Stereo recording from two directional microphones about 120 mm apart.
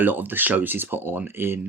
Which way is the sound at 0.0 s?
15° right (ahead or behind).